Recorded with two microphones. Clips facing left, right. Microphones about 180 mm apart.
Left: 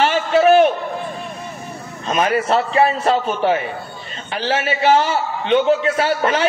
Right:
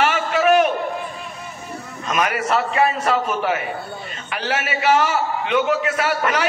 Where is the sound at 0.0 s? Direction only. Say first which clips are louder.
Left 4 dB; 30° left (ahead or behind).